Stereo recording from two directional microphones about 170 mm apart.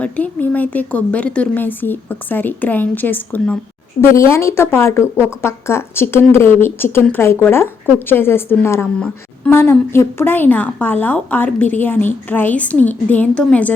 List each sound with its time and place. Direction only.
0.0 s a woman's voice: 10° left (ahead or behind)